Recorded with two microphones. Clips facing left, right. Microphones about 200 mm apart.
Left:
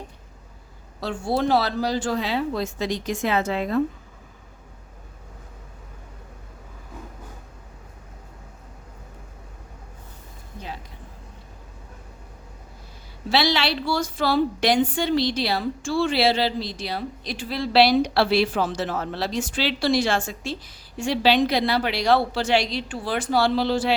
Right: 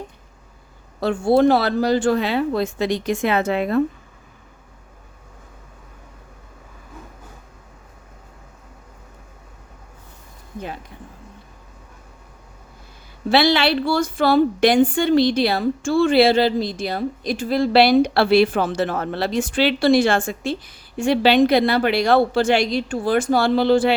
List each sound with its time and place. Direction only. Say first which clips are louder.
1.0 s speech: right 8 dB; 55° right (ahead or behind)
13.3 s a woman's voice: right 6 dB; 55° right (ahead or behind)